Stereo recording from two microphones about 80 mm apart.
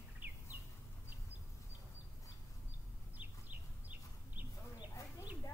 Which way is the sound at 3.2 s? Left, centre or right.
Right.